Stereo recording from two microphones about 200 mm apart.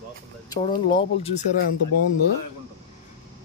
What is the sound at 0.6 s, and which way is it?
Speech, 25° left (ahead or behind).